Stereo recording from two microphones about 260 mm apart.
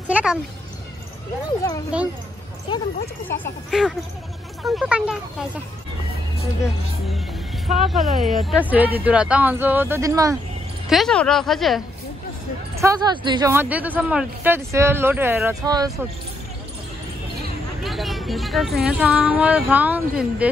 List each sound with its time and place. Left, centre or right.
0.1 s speech: centre
1.9 s speech: centre
2.7 s speech: centre
3.7 s speech: centre
7.6 s speech: centre
10.9 s speech: centre
12.7 s speech: centre
17.8 s speech: centre